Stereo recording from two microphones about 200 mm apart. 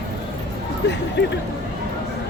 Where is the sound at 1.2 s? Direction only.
60° left (ahead or behind).